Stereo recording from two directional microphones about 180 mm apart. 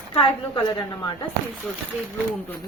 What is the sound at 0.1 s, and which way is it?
Speech, 30° left (ahead or behind).